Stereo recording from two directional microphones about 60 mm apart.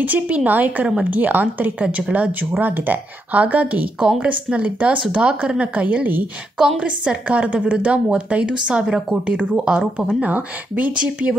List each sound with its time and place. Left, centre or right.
0.0 s speech: right